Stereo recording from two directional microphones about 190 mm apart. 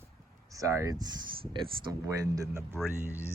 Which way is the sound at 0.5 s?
15° right (ahead or behind).